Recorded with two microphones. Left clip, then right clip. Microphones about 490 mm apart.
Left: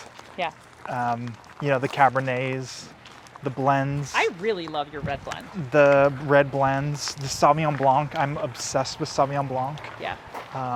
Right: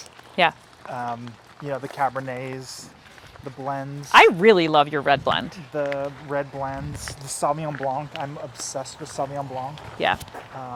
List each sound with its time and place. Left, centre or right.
0.4 s speech: right
0.9 s speech: centre
1.6 s speech: left
3.6 s speech: left
4.1 s speech: right
5.7 s speech: left
6.3 s speech: left
7.1 s speech: left
7.9 s speech: left
9.1 s speech: left
10.0 s speech: right